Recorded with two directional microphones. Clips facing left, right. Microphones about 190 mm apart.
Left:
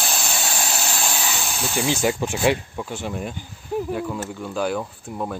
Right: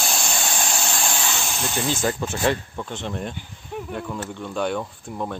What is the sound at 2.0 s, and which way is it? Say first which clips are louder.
Speech: left 2 dB; 15° left (ahead or behind).